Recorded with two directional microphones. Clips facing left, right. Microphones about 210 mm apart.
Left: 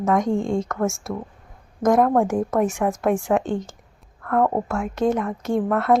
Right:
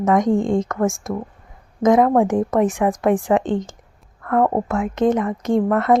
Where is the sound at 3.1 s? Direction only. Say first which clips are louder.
Right 3 dB; 15° right (ahead or behind).